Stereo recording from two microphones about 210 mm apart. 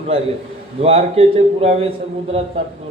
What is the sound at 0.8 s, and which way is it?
A man's voice, 30° right (ahead or behind).